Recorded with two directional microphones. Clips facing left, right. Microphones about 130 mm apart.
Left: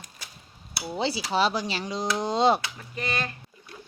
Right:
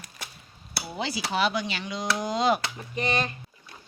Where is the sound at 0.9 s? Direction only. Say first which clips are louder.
Left 3 dB; 30° left (ahead or behind).